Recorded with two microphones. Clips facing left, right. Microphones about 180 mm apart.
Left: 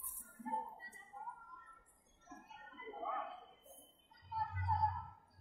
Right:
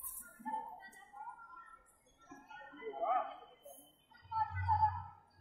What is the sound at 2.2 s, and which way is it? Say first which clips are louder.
Music: right 1 dB; 60° right (ahead or behind).